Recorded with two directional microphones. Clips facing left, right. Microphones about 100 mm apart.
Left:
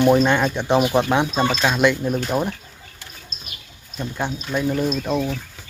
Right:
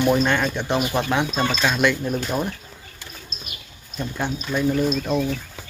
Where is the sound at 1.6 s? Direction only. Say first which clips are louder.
Left 2 dB; 15° left (ahead or behind).